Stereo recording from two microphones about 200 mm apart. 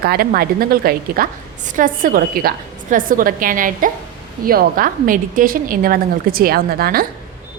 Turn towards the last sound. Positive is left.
turn(degrees=-50)  # may be behind; listen again after turning